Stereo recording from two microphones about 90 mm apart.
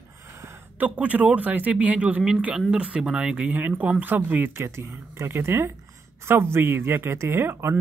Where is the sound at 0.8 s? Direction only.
15° right (ahead or behind).